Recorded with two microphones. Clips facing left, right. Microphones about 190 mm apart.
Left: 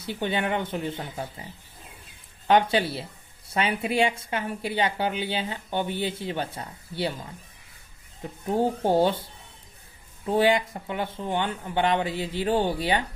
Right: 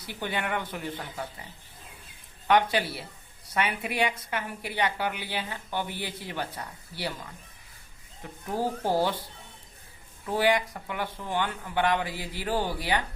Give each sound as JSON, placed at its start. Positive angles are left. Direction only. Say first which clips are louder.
{"t": 0.0, "sound": "a woman's voice", "louder": "left 5 dB", "side_deg": 25}
{"t": 2.5, "sound": "a woman's voice", "louder": "left 3 dB", "side_deg": 25}
{"t": 8.2, "sound": "a woman's voice", "louder": "left 5 dB", "side_deg": 25}